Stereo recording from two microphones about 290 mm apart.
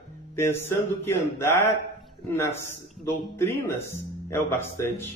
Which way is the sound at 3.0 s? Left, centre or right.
Centre.